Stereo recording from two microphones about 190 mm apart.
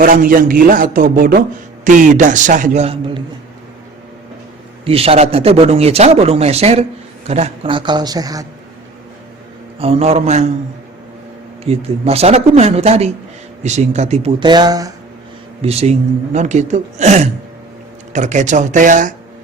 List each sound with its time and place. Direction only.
0.0 s speech: 45° right (ahead or behind); by 3.2 s 30° right (ahead or behind)
4.9 s a man's voice: 30° right (ahead or behind)
9.7 s a man's voice: 30° right (ahead or behind)
11.6 s a man's voice: 30° right (ahead or behind)
14.3 s speech: 25° right (ahead or behind)
15.6 s a man's voice: 35° right (ahead or behind)